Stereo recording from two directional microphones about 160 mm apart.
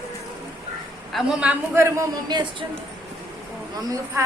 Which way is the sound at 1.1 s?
5° right (ahead or behind).